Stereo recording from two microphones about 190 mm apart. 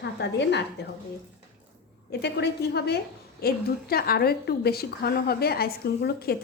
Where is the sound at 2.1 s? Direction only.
60° left (ahead or behind).